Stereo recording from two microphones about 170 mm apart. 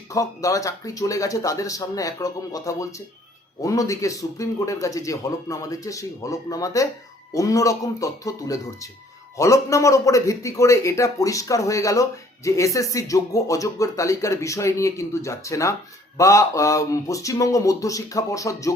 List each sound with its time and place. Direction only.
0.1 s a man's voice: 20° left (ahead or behind)